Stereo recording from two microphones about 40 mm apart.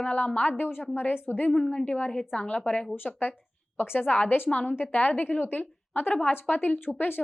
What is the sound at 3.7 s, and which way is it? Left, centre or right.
Speech, left.